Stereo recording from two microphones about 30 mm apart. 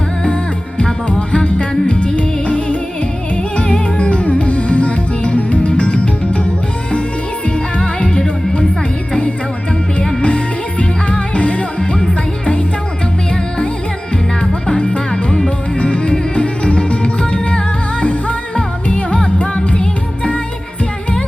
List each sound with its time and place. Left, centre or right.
0.8 s music: left
10.2 s music: left
14.7 s music: left